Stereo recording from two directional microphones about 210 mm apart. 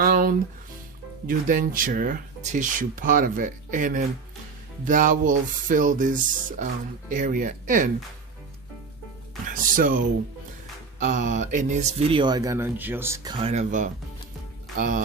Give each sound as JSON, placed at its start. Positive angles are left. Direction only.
{"t": 0.0, "sound": "music", "side_deg": -45}
{"t": 1.3, "sound": "speech", "side_deg": -40}
{"t": 9.5, "sound": "speech", "side_deg": -40}
{"t": 11.0, "sound": "speech", "side_deg": -35}
{"t": 13.4, "sound": "speech", "side_deg": -30}